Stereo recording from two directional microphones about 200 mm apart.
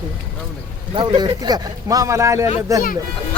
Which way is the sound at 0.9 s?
20° right (ahead or behind).